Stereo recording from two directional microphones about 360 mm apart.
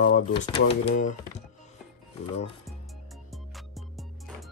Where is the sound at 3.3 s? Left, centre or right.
Centre.